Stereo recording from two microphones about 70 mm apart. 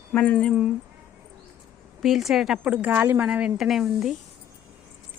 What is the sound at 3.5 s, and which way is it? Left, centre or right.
Speech, centre.